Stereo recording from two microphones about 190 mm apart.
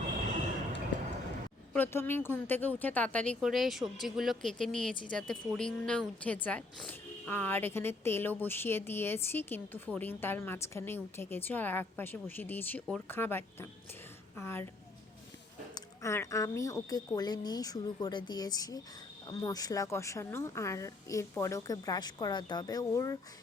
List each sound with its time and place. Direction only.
1.7 s speech: 10° left (ahead or behind)
15.7 s speech: 15° left (ahead or behind)